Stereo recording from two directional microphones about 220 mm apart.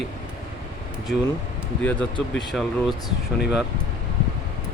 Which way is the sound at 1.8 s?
5° left (ahead or behind).